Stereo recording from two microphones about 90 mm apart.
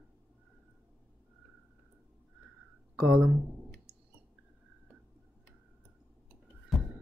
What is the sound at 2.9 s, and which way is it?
Speech, 15° right (ahead or behind).